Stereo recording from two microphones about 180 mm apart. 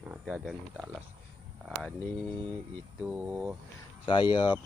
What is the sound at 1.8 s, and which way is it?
Speech, 5° left (ahead or behind).